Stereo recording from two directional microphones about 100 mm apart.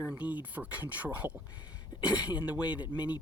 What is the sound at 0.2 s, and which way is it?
Speech, 15° right (ahead or behind).